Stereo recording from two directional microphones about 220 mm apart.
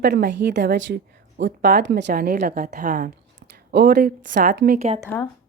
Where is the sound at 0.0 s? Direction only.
50° right (ahead or behind).